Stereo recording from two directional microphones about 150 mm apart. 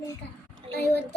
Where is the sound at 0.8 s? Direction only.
90° left.